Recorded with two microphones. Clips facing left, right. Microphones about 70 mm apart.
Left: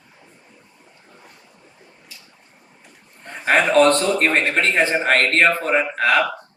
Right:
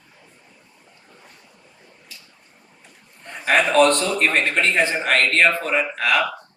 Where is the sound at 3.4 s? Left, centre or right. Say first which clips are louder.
Left 1 dB; left.